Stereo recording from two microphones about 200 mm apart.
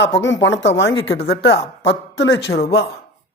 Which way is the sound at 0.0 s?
65° left (ahead or behind).